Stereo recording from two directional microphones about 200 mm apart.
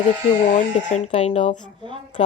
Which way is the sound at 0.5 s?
35° left (ahead or behind).